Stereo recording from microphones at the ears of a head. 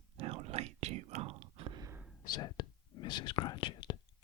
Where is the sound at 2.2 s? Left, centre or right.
Left.